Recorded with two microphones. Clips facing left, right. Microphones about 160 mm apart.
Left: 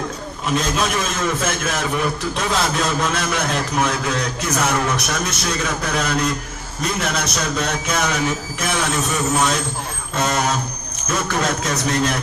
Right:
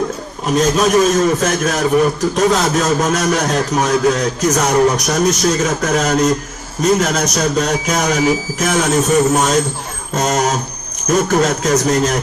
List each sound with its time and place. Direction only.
0.6 s speech: 40° right (ahead or behind)